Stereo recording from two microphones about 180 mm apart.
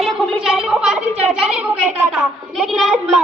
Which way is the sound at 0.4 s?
Centre (ahead or behind).